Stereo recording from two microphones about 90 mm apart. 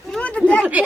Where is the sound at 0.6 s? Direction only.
15° right (ahead or behind).